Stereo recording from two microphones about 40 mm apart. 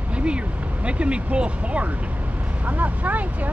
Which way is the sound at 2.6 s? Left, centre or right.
Right.